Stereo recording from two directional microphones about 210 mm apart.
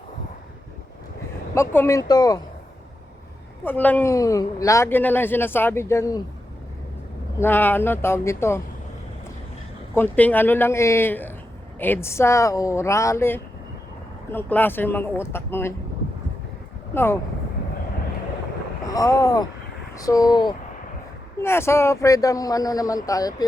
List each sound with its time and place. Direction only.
1.5 s speech: 10° left (ahead or behind)
3.6 s speech: 10° left (ahead or behind)
7.3 s speech: 10° left (ahead or behind)
9.9 s speech: 10° left (ahead or behind)
16.9 s speech: 10° left (ahead or behind)
18.9 s speech: 15° left (ahead or behind)